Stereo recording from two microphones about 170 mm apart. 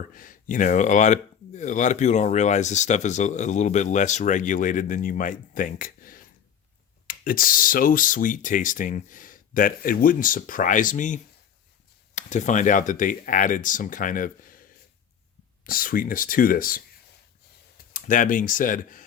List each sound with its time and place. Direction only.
0.1 s speech: 50° left (ahead or behind)
15.6 s speech: 55° left (ahead or behind)
17.9 s speech: 50° left (ahead or behind)